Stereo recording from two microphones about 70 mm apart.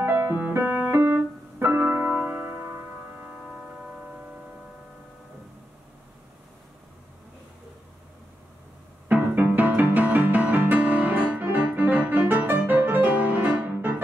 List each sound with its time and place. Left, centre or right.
0.0 s music: right
0.9 s keyboard: right
1.9 s music: right
4.1 s a sound: centre
9.1 s music: right
9.8 s piano: right